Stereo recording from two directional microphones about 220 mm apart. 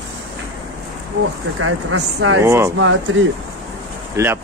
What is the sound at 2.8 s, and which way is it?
Speech, 60° right (ahead or behind).